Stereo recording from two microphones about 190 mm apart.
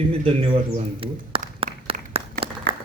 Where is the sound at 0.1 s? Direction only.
30° right (ahead or behind).